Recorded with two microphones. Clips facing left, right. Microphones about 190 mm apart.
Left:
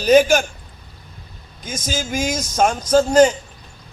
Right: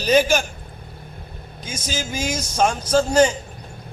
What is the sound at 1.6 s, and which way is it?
Speech, 50° left (ahead or behind).